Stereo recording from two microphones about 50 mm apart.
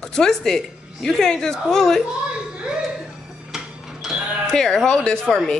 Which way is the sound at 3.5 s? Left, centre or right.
Centre.